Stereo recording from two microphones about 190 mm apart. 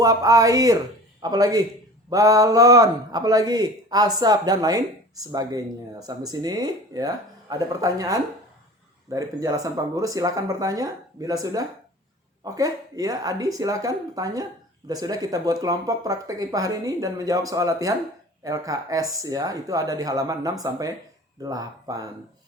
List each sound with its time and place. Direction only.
0.0 s speech: 20° right (ahead or behind)